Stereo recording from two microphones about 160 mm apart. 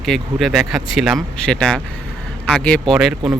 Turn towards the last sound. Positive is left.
turn(degrees=0)  # may be behind; listen again after turning